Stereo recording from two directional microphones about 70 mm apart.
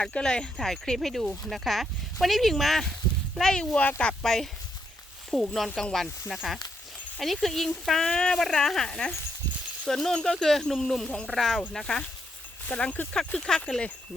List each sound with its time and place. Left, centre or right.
0.0 s speech: centre
4.2 s speech: centre
6.2 s speech: centre
12.6 s speech: centre
13.1 s speech: centre